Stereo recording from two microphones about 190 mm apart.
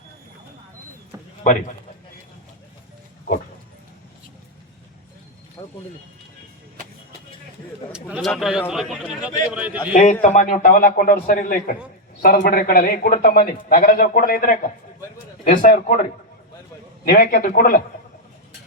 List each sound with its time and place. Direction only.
5.6 s a sound: 25° left (ahead or behind)
7.9 s a man's voice: 5° right (ahead or behind)
9.9 s a man's voice: 40° left (ahead or behind)
17.1 s a man's voice: 50° left (ahead or behind)